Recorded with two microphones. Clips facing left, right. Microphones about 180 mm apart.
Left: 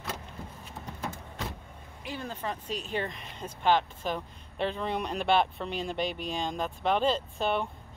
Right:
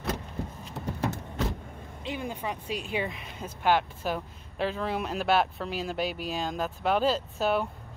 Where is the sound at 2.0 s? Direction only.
15° right (ahead or behind).